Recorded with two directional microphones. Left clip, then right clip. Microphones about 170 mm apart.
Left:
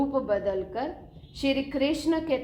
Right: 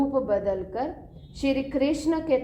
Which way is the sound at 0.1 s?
40° right (ahead or behind).